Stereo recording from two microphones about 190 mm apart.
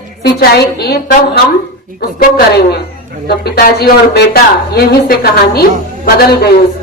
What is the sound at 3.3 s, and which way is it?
Speech, 55° left (ahead or behind).